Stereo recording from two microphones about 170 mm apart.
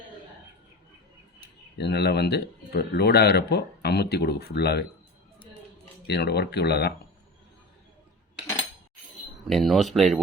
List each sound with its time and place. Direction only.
1.8 s speech: 75° left (ahead or behind)
6.1 s speech: 75° left (ahead or behind)
9.5 s speech: centre (ahead or behind)